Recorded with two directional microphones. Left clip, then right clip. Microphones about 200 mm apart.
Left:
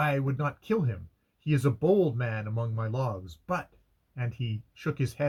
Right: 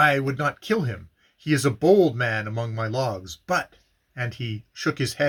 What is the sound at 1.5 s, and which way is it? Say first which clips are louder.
Speech: right 7 dB; 15° right (ahead or behind).